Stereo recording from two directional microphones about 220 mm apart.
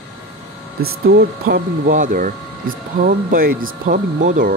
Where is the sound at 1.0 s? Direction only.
45° right (ahead or behind).